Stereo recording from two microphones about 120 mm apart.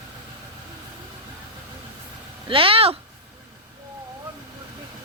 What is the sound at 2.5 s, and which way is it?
Speech, 50° right (ahead or behind).